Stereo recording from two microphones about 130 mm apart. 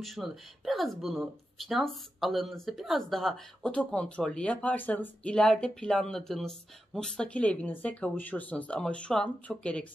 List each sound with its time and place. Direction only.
0.0 s speech: centre (ahead or behind)